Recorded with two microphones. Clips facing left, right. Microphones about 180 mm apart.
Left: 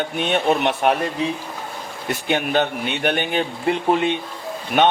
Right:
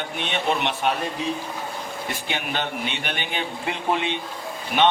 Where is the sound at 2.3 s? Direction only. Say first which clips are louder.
Left 8 dB; 45° left (ahead or behind).